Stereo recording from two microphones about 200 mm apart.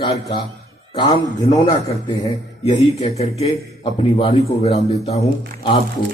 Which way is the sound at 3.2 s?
30° left (ahead or behind).